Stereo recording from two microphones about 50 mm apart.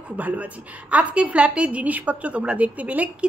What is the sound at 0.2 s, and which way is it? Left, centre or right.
A woman's voice, right.